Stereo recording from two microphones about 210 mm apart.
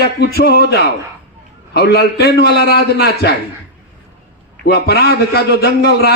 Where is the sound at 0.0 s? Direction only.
50° left (ahead or behind).